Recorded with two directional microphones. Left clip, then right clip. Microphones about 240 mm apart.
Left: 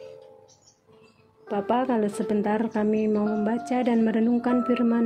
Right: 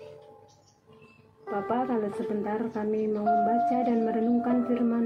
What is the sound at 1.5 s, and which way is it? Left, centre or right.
A woman's voice, left.